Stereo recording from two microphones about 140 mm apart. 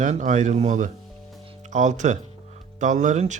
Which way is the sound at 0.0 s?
65° right (ahead or behind).